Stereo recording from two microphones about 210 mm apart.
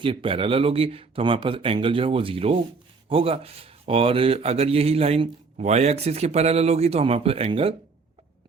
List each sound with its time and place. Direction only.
0.0 s speech: 25° right (ahead or behind)